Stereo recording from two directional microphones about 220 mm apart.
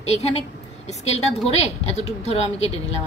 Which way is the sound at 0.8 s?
30° left (ahead or behind).